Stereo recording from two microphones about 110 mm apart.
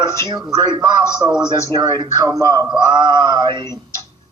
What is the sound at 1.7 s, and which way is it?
A man's voice, 35° right (ahead or behind).